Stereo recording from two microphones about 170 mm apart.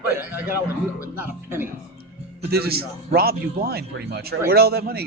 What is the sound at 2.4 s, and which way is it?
A man's voice, 65° right (ahead or behind).